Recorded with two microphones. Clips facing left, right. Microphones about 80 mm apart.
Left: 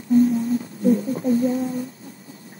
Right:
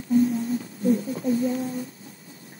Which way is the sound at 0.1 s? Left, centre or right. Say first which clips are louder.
Left 4 dB; centre.